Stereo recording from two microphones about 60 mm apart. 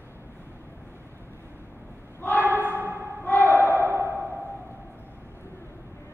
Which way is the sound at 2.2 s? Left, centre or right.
Left.